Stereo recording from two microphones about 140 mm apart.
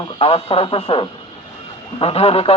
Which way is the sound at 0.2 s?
45° left (ahead or behind).